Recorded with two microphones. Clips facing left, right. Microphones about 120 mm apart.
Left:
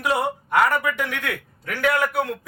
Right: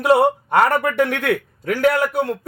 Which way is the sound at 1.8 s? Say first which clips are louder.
Right 3 dB; 30° right (ahead or behind).